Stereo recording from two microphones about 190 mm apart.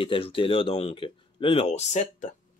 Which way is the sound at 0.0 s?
30° left (ahead or behind).